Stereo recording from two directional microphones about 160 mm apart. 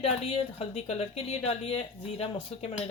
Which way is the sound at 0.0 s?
40° left (ahead or behind).